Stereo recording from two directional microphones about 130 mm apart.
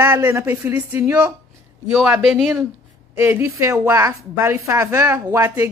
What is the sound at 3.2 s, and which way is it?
A woman's voice, 15° right (ahead or behind).